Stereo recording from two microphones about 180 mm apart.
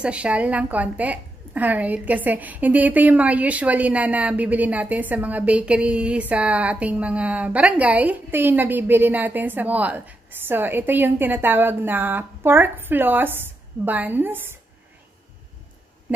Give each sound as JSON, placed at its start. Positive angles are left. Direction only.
{"t": 0.0, "sound": "a woman's voice", "side_deg": -5}